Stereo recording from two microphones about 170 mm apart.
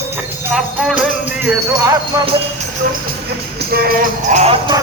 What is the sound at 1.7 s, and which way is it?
Speech, 20° right (ahead or behind).